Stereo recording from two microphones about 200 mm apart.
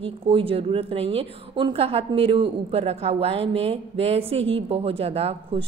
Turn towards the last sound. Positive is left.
turn(degrees=-30)  # may be behind; listen again after turning